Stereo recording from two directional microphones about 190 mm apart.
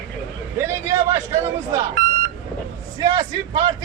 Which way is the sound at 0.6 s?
15° right (ahead or behind).